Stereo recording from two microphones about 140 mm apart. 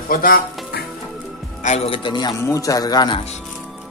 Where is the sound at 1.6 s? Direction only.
45° left (ahead or behind).